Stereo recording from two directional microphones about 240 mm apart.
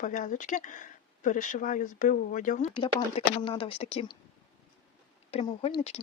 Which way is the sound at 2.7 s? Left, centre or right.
Left.